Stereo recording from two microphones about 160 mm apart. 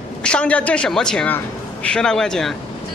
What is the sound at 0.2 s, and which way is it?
A man's voice, 5° left (ahead or behind).